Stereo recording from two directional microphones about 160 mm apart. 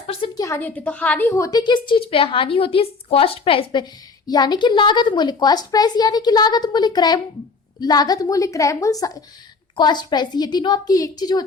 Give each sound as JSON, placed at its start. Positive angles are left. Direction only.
{"t": 0.3, "sound": "a woman's voice", "side_deg": 20}